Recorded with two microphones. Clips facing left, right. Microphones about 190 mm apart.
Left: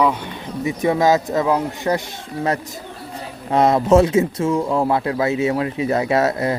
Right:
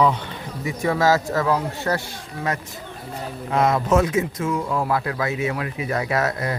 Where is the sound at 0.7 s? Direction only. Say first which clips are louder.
Left 3 dB; 20° left (ahead or behind).